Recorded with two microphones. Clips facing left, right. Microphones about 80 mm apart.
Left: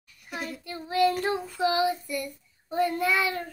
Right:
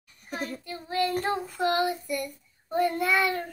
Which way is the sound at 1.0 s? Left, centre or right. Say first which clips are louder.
Left 4 dB; right.